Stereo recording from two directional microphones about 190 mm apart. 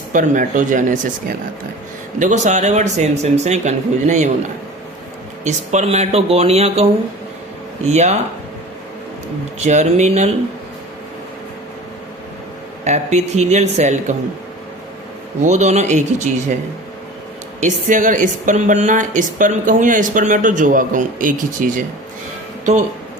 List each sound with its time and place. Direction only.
0.1 s speech: 45° right (ahead or behind)
2.1 s a man's voice: 40° right (ahead or behind)
5.5 s a man's voice: 35° right (ahead or behind)
7.9 s a man's voice: 35° right (ahead or behind)
9.6 s a man's voice: 35° right (ahead or behind)
12.8 s a man's voice: 35° right (ahead or behind)
15.4 s a man's voice: 35° right (ahead or behind)
17.6 s speech: 40° right (ahead or behind)